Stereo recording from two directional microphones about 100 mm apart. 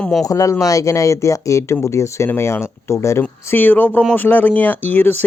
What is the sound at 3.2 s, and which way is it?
Speech, 20° left (ahead or behind).